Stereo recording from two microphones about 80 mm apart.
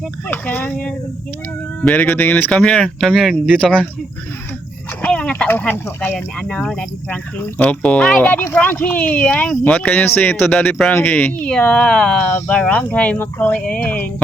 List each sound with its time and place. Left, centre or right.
0.3 s speech: centre
3.1 s speech: centre
3.6 s speech: centre
5.0 s a sound: centre
5.5 s speech: left
6.1 s speech: centre
7.1 s speech: left